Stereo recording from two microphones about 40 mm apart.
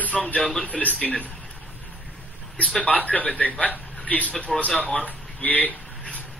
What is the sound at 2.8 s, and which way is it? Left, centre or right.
A man's voice, left.